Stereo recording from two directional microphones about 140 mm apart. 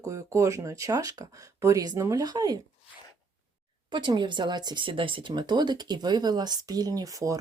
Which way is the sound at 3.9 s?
35° right (ahead or behind).